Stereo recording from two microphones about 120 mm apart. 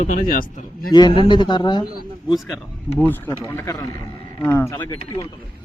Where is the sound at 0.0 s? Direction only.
90° left.